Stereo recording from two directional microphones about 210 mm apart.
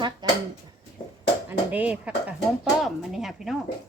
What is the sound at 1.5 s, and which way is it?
Speech, 10° right (ahead or behind).